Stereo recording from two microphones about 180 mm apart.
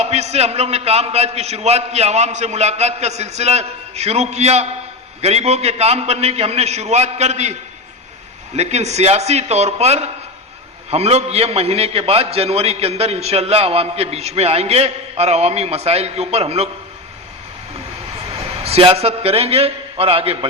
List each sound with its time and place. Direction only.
0.0 s a man's voice: 35° right (ahead or behind)
8.5 s a man's voice: 35° right (ahead or behind)
18.6 s a man's voice: 35° right (ahead or behind)